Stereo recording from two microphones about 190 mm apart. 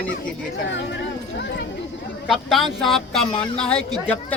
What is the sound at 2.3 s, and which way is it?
A woman's voice, centre (ahead or behind).